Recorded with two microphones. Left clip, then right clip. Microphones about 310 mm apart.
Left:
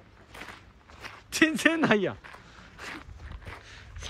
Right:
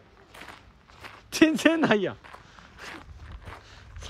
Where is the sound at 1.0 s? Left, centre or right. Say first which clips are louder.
Right 3 dB; centre.